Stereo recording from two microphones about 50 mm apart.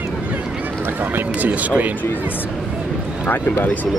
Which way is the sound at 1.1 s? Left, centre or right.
Right.